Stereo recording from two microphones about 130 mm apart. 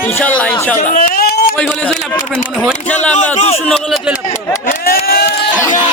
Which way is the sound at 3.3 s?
60° left (ahead or behind).